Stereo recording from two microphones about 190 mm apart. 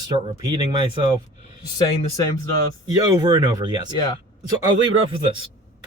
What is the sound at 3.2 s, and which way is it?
Speech, 20° right (ahead or behind).